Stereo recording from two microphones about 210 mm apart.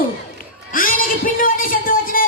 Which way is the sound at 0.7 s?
40° left (ahead or behind).